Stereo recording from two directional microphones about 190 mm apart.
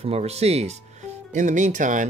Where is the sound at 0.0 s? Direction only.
35° right (ahead or behind).